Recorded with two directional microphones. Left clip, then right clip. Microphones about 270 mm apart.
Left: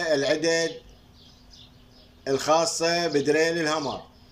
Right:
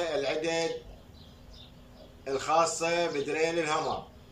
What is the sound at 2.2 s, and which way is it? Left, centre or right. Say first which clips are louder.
A man's voice: left 4 dB; left.